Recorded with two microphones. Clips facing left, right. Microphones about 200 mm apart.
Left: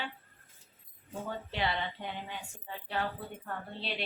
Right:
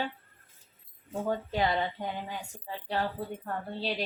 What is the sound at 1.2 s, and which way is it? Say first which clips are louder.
Speech: right 6 dB; 45° right (ahead or behind).